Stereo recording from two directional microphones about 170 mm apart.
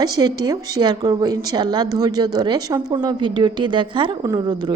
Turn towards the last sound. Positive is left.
turn(degrees=-25)  # may be behind; listen again after turning